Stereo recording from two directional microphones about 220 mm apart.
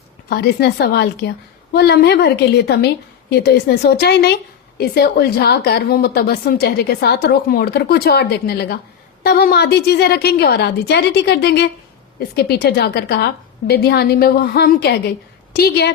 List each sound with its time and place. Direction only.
0.3 s a woman's voice: 45° left (ahead or behind)